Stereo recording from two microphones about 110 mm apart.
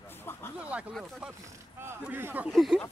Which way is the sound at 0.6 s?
10° right (ahead or behind).